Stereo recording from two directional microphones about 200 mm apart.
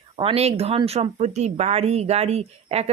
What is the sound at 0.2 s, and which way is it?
Speech, 30° right (ahead or behind).